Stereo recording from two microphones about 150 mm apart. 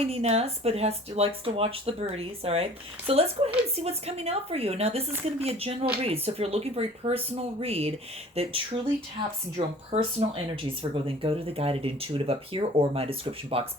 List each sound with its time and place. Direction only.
0.0 s a woman's voice: 45° right (ahead or behind)